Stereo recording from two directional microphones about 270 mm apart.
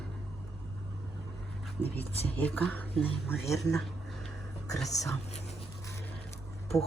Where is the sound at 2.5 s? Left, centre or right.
Centre.